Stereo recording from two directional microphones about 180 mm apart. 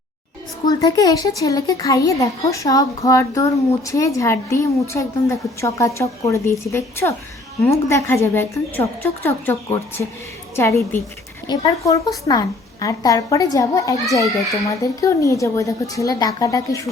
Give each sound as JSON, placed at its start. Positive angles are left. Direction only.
{"t": 0.7, "sound": "a woman's voice", "side_deg": 20}